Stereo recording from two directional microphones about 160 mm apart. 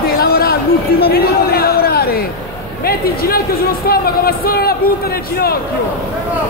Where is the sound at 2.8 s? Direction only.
70° left (ahead or behind).